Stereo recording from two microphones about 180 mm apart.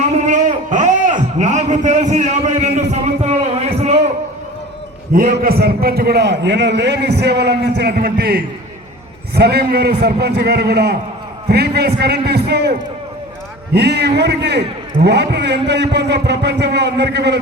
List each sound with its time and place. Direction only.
0.3 s a sound: 45° right (ahead or behind)
5.1 s a man's voice: 55° right (ahead or behind)
13.7 s a man's voice: 65° right (ahead or behind)